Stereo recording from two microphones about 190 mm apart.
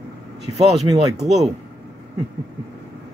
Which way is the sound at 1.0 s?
20° right (ahead or behind).